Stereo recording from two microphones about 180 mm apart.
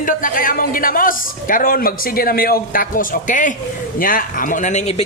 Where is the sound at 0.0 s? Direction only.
50° left (ahead or behind).